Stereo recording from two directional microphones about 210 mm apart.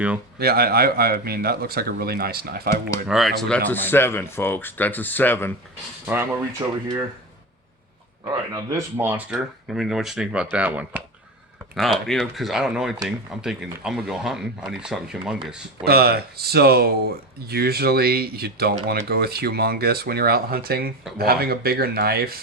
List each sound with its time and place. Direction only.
0.3 s speech: 50° right (ahead or behind)
3.1 s speech: centre (ahead or behind)
6.6 s speech: 20° right (ahead or behind)
8.5 s speech: 10° right (ahead or behind)
15.8 s speech: 45° right (ahead or behind)